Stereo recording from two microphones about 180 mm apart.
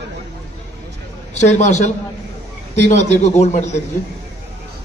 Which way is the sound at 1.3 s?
40° left (ahead or behind).